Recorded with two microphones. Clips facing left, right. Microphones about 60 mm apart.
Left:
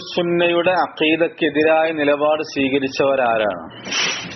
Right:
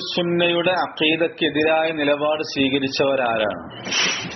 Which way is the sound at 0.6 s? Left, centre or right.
Left.